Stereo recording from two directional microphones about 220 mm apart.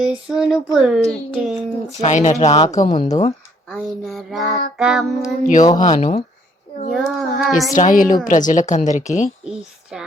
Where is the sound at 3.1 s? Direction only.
20° left (ahead or behind).